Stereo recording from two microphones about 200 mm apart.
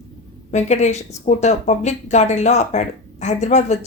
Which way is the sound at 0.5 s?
35° left (ahead or behind).